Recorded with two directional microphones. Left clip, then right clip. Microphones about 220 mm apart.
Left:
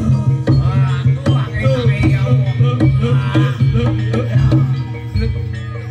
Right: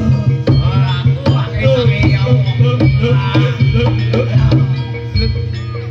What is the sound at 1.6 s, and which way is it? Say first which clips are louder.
Music: right 6 dB; 35° right (ahead or behind).